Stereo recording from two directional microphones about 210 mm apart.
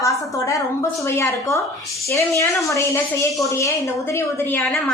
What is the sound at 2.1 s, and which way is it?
A woman's voice, 15° left (ahead or behind).